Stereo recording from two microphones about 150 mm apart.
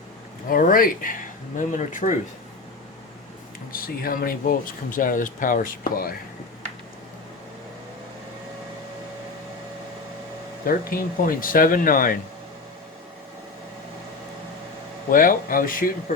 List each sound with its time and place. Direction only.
0.4 s speech: 70° left (ahead or behind)
3.7 s speech: 75° left (ahead or behind)
10.7 s speech: 70° left (ahead or behind)
15.1 s speech: 65° left (ahead or behind)